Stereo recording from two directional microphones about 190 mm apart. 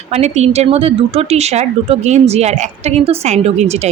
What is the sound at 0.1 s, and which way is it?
Speech, 35° right (ahead or behind).